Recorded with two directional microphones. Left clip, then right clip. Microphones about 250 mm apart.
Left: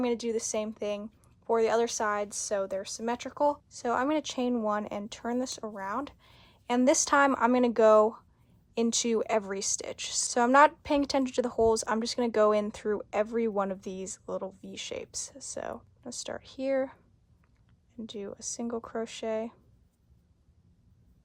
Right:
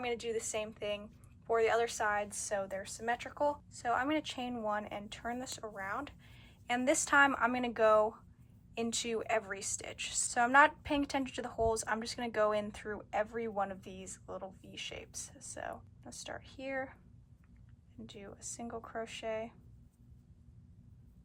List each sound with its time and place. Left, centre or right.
0.0 s a woman's voice: centre
18.0 s a woman's voice: left